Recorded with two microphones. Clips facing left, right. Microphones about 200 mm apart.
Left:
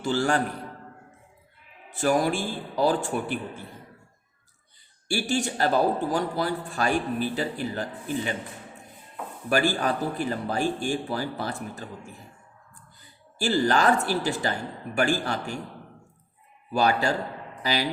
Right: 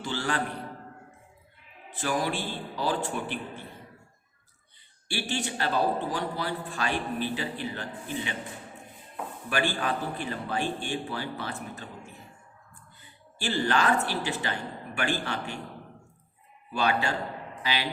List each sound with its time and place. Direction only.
0.0 s a man's voice: 45° left (ahead or behind)
2.0 s a man's voice: 45° left (ahead or behind)
5.0 s a man's voice: 45° left (ahead or behind)
9.8 s a man's voice: 40° left (ahead or behind)
16.7 s a man's voice: 40° left (ahead or behind)